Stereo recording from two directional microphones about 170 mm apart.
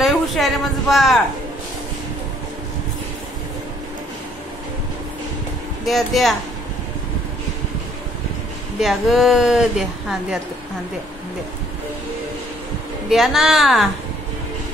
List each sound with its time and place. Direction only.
0.0 s speech: centre (ahead or behind)
5.9 s speech: centre (ahead or behind)
8.7 s speech: centre (ahead or behind)
13.1 s speech: centre (ahead or behind)